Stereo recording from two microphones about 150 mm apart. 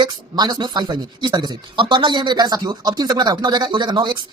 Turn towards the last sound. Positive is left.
turn(degrees=-30)  # may be behind; listen again after turning